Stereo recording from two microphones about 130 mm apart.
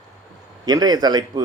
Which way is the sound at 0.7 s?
30° right (ahead or behind).